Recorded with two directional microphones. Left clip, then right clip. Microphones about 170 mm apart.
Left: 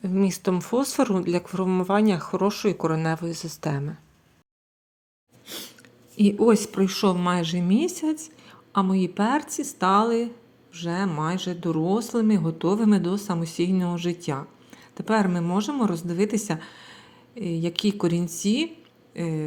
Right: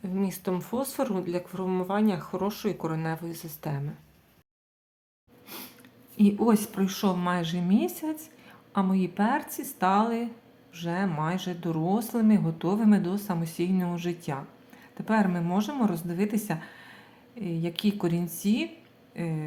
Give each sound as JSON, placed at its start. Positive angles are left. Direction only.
{"t": 0.0, "sound": "speech", "side_deg": 35}
{"t": 6.1, "sound": "speech", "side_deg": 25}